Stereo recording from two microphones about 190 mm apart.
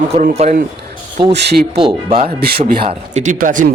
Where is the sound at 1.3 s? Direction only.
60° right (ahead or behind).